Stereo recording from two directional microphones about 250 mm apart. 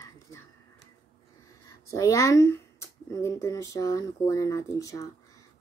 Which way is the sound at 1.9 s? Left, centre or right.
Centre.